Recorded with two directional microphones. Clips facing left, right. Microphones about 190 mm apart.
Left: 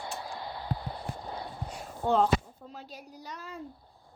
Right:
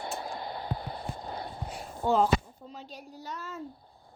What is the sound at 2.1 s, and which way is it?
Speech, centre (ahead or behind).